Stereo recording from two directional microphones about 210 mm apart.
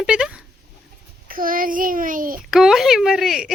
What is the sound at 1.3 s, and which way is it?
Speech, 40° right (ahead or behind).